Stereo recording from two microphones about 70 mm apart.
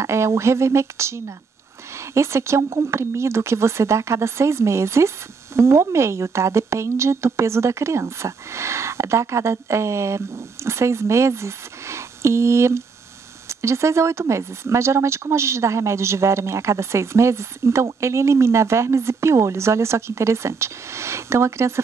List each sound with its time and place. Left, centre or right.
0.0 s speech: right